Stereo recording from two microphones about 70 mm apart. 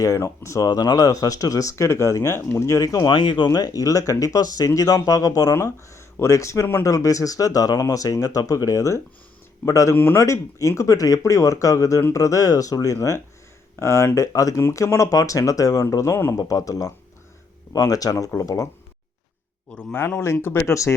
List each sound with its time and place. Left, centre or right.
0.2 s speech: left
0.7 s speech: left
3.2 s speech: left
5.5 s speech: left
9.9 s speech: left
10.2 s speech: left
14.2 s speech: left
19.7 s a man's voice: centre
20.1 s speech: left